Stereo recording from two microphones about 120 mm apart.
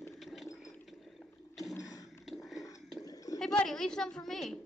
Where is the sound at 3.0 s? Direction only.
30° left (ahead or behind).